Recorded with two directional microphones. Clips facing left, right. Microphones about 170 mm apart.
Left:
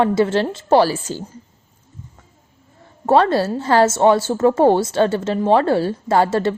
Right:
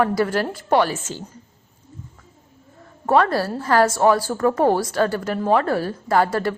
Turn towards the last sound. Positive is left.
turn(degrees=25)  # may be behind; listen again after turning